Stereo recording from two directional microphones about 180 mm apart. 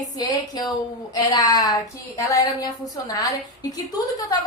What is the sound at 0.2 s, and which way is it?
A woman's voice, 25° left (ahead or behind).